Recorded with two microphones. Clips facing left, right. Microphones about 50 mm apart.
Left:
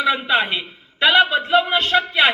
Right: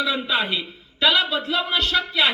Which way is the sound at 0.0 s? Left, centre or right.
Left.